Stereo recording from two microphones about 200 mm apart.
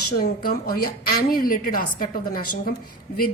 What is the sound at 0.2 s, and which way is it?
A woman's voice, 50° left (ahead or behind).